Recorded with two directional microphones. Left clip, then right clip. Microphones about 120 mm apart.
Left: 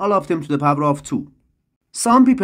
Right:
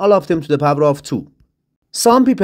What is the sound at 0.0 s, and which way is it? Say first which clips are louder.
Speech: right 5 dB; 30° right (ahead or behind).